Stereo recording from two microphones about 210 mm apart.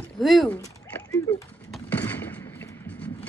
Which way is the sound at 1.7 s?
10° left (ahead or behind).